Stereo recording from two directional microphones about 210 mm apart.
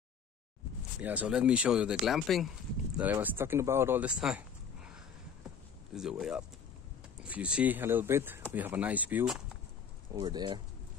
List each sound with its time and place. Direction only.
1.0 s speech: 5° right (ahead or behind)
10.1 s speech: 20° right (ahead or behind)